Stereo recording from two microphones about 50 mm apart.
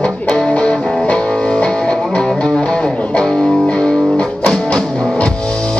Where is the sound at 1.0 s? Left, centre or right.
Left.